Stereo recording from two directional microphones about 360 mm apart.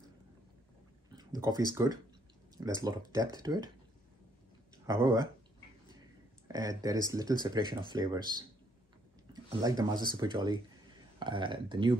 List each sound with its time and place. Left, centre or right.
1.1 s speech: centre
4.8 s speech: centre
6.4 s speech: centre